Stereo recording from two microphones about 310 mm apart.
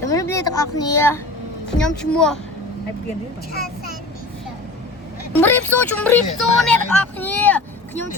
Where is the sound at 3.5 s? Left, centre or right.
Left.